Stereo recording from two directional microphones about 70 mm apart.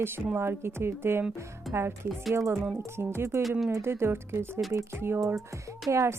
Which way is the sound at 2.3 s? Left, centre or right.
Right.